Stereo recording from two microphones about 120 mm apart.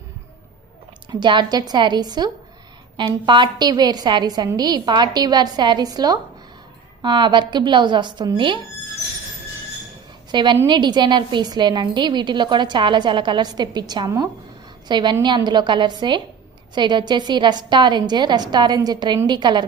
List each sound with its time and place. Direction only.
1.1 s a woman's voice: 40° right (ahead or behind)
10.3 s a woman's voice: 40° right (ahead or behind)